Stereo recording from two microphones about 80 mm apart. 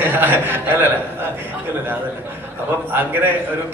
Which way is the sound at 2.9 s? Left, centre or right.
Right.